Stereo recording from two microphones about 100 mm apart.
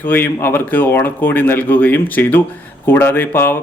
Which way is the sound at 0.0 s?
20° left (ahead or behind).